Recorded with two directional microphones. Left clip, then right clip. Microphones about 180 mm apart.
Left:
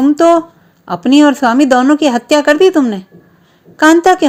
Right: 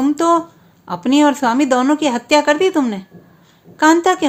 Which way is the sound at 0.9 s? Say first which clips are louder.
Left 5 dB; 25° left (ahead or behind).